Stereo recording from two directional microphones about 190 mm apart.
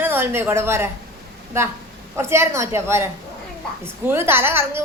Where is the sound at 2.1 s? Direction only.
15° right (ahead or behind).